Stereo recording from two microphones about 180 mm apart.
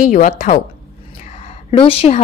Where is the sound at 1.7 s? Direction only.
30° left (ahead or behind).